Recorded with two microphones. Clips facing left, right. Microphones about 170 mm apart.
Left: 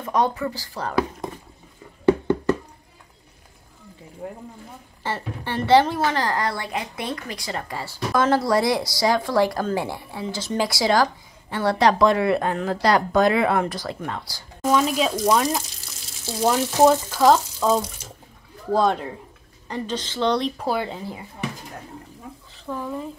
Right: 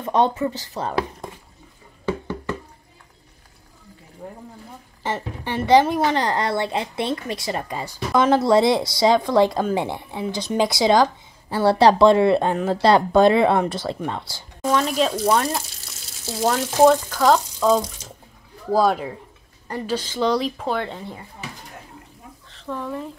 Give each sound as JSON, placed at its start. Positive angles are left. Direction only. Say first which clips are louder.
{"t": 0.0, "sound": "a woman's voice", "louder": "right 3 dB", "side_deg": -25}
{"t": 5.0, "sound": "a woman's voice", "louder": "right 2 dB", "side_deg": -15}
{"t": 11.5, "sound": "a woman's voice", "louder": "right 4 dB", "side_deg": -30}
{"t": 14.7, "sound": "speech", "louder": "even", "side_deg": 5}
{"t": 20.6, "sound": "speech", "louder": "even", "side_deg": 5}
{"t": 22.5, "sound": "speech", "louder": "right 1 dB", "side_deg": 5}